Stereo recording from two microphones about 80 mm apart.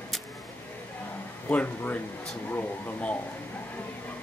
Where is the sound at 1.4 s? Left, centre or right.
Left.